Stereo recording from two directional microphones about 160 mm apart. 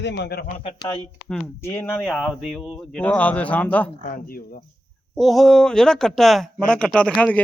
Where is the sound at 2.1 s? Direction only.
Centre (ahead or behind).